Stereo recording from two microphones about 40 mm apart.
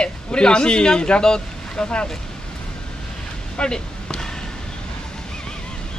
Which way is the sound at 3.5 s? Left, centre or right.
Left.